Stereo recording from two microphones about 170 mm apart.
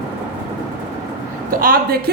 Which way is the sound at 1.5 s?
55° right (ahead or behind).